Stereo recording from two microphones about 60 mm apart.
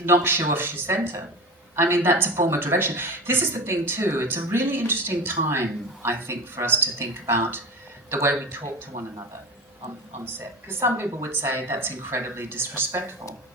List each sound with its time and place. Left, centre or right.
0.0 s a woman's voice: right
10.3 s a woman's voice: right